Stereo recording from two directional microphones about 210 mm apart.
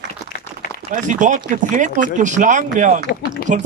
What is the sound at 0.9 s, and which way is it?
Speech, 35° right (ahead or behind).